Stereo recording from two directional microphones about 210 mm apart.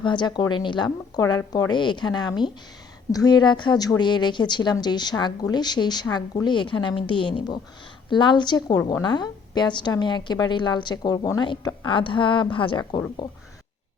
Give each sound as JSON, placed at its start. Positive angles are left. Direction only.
{"t": 0.0, "sound": "a woman's voice", "side_deg": 20}